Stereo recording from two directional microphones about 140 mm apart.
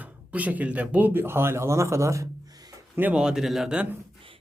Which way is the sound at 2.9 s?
10° right (ahead or behind).